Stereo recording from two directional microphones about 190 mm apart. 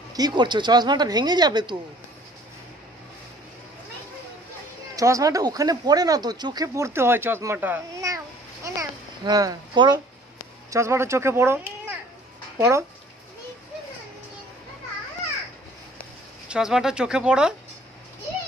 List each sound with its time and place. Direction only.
0.1 s speech: 20° right (ahead or behind)
4.9 s speech: 15° right (ahead or behind)
8.6 s a sound: 20° right (ahead or behind)
10.7 s speech: 15° right (ahead or behind)
16.4 s speech: 5° right (ahead or behind)